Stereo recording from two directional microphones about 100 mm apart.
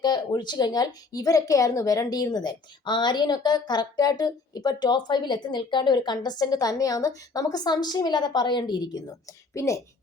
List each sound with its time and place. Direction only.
0.0 s a woman's voice: 45° left (ahead or behind)
9.6 s a woman's voice: 30° left (ahead or behind)